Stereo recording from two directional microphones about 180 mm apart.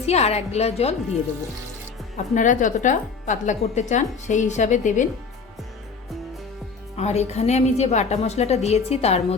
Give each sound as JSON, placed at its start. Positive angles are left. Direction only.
{"t": 0.0, "sound": "a woman's voice", "side_deg": 35}
{"t": 2.1, "sound": "speech", "side_deg": 45}
{"t": 6.9, "sound": "a woman's voice", "side_deg": 35}